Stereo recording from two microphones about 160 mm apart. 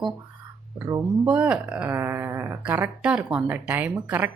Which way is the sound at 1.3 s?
5° right (ahead or behind).